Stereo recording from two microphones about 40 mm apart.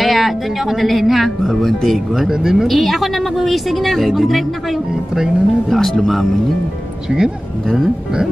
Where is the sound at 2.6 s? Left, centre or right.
Centre.